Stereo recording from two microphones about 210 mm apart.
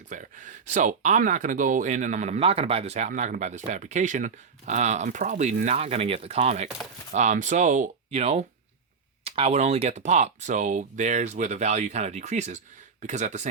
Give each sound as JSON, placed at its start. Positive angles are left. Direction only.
{"t": 0.1, "sound": "speech", "side_deg": -35}